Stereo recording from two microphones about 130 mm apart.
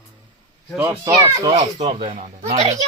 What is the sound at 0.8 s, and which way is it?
Speech, 25° right (ahead or behind).